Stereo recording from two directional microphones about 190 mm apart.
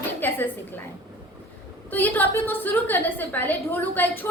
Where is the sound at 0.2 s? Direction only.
10° left (ahead or behind).